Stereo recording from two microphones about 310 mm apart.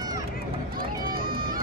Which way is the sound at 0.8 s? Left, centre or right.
Right.